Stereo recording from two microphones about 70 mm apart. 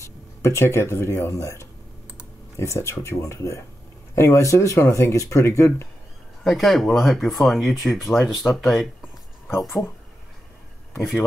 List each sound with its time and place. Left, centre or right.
0.0 s speech: left
6.4 s speech: centre